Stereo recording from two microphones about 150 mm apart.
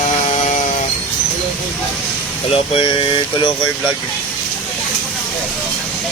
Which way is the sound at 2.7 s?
35° left (ahead or behind).